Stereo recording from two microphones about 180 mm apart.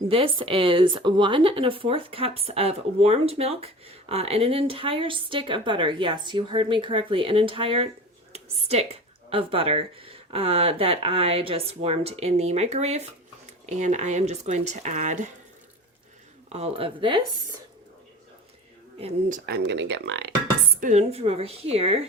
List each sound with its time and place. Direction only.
0.1 s speech: 30° right (ahead or behind)
16.5 s speech: 35° right (ahead or behind)
19.3 s speech: 65° right (ahead or behind)
20.8 s speech: 35° right (ahead or behind)